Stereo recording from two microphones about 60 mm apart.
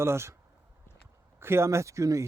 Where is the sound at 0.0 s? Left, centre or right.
Right.